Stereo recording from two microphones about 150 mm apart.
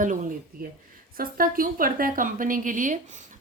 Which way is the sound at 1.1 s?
70° right (ahead or behind).